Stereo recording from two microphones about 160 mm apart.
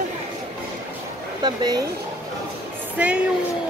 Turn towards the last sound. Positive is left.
turn(degrees=-10)  # may be behind; listen again after turning